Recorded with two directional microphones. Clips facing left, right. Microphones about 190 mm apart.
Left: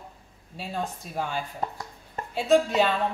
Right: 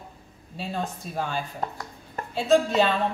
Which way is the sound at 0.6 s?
10° left (ahead or behind).